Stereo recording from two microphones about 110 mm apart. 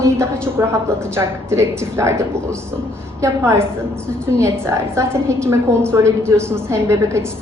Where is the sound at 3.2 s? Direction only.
25° right (ahead or behind).